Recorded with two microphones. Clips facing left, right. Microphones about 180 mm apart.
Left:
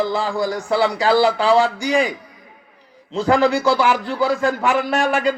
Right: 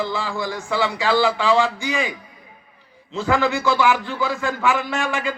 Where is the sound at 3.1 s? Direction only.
35° left (ahead or behind).